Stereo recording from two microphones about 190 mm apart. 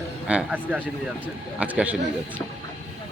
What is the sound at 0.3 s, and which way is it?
Speech, 5° right (ahead or behind).